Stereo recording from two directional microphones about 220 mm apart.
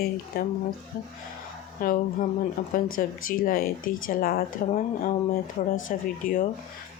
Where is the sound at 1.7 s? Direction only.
40° left (ahead or behind).